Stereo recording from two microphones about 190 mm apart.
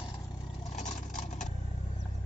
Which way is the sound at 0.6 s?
40° left (ahead or behind).